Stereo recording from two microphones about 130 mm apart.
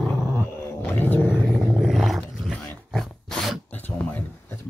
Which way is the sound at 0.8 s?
15° left (ahead or behind).